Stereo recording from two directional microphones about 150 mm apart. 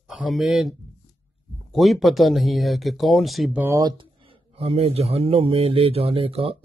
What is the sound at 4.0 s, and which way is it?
Speech, 35° right (ahead or behind).